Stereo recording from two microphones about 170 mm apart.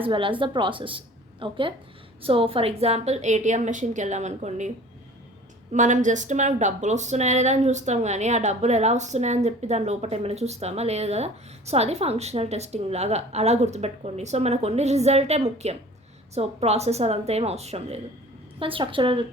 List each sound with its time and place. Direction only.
0.0 s a woman's voice: 30° right (ahead or behind)
5.7 s a woman's voice: 45° right (ahead or behind); by 19.2 s 30° right (ahead or behind)